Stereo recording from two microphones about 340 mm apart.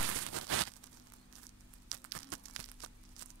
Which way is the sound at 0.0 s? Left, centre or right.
Right.